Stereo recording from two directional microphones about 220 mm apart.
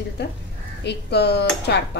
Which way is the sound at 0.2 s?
50° left (ahead or behind).